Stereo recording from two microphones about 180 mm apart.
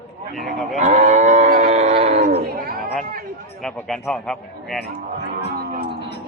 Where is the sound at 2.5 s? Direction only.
55° right (ahead or behind).